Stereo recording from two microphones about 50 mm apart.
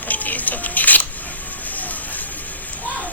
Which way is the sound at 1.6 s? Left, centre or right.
Left.